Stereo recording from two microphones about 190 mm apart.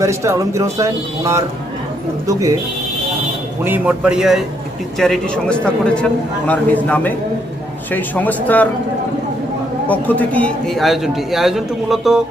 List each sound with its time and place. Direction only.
0.0 s speech: 15° right (ahead or behind)
3.6 s a man's voice: 10° right (ahead or behind); by 8.7 s 10° left (ahead or behind)
9.8 s a man's voice: 10° left (ahead or behind)